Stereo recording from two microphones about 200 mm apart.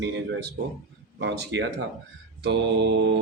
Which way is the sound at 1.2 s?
60° right (ahead or behind).